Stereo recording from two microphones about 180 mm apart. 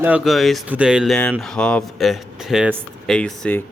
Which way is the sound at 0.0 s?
5° right (ahead or behind).